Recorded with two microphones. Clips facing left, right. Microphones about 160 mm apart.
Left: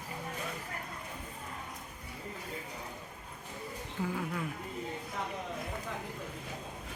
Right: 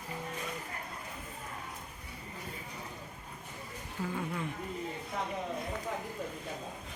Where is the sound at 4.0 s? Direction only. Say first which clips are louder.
Left 2 dB; 15° left (ahead or behind).